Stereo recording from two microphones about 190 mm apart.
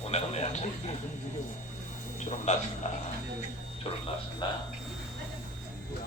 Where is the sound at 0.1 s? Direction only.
35° left (ahead or behind).